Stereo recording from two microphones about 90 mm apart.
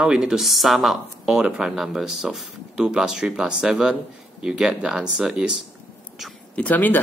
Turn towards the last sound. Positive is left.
turn(degrees=20)  # may be behind; listen again after turning